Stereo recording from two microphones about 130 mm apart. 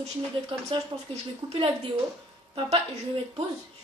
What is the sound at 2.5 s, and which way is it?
Speech, 40° right (ahead or behind).